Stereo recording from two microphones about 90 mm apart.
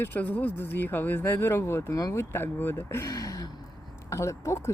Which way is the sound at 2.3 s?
25° left (ahead or behind).